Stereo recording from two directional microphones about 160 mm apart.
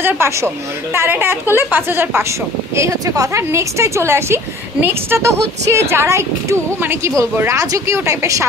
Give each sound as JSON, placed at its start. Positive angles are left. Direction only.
{"t": 0.0, "sound": "a woman's voice", "side_deg": -15}